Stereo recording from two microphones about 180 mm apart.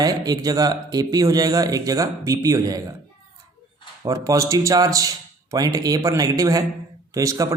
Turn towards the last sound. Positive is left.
turn(degrees=-20)  # may be behind; listen again after turning